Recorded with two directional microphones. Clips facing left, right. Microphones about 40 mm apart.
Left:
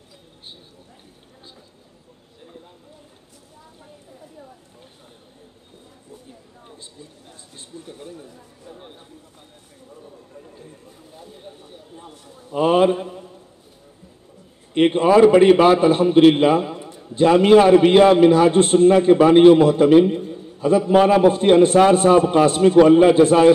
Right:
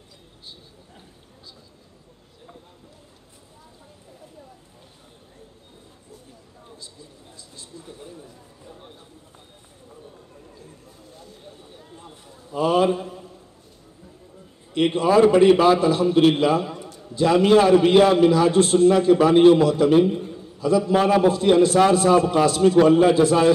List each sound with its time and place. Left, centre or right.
7.3 s a sound: left
12.5 s a man's voice: left
14.7 s a man's voice: left